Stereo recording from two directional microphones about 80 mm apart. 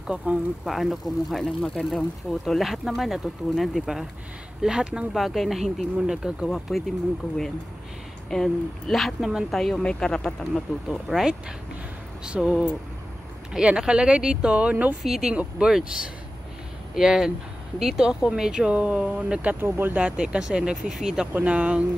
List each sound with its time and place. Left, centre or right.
0.0 s speech: centre
0.7 s speech: centre
6.4 s speech: centre
8.3 s speech: centre
9.6 s speech: centre
11.1 s speech: centre
15.0 s speech: centre
19.6 s speech: right; by 21.3 s centre
21.3 s speech: centre